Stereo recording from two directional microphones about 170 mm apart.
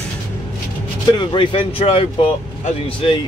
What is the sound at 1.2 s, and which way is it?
Speech, 30° left (ahead or behind).